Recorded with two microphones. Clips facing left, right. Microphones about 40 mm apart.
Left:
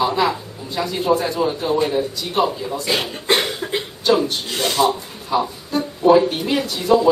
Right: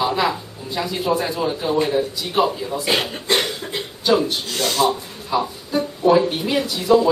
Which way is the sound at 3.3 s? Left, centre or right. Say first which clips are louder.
Left 3 dB; centre.